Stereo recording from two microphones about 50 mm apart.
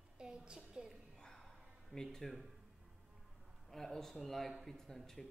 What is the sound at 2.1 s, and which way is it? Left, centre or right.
Speech, centre.